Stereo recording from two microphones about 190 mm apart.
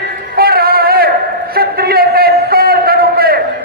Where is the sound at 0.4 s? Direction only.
55° right (ahead or behind).